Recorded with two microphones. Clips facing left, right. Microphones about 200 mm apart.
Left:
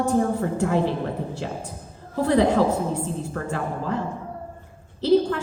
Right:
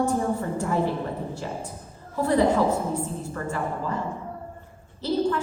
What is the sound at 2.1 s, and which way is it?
A woman's voice, 70° left (ahead or behind).